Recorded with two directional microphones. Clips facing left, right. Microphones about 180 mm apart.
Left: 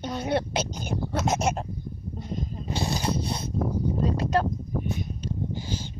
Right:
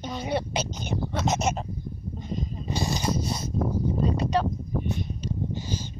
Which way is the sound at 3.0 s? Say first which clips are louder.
Even; 60° left (ahead or behind).